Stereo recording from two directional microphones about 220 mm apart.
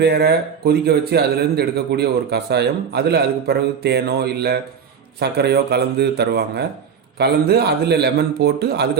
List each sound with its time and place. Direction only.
0.0 s a man's voice: 45° right (ahead or behind)